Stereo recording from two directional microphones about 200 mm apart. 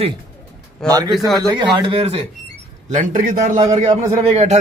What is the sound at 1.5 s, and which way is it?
Speech, 20° right (ahead or behind).